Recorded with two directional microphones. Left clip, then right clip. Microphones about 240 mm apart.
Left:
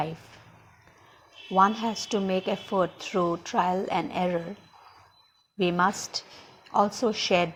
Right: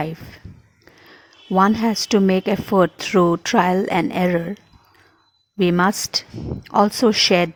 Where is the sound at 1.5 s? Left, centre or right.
Right.